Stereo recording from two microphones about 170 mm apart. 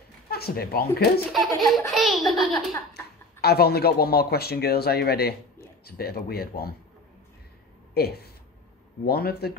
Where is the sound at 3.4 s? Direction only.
65° left (ahead or behind).